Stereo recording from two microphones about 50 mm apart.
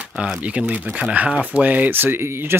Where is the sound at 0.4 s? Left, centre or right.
Right.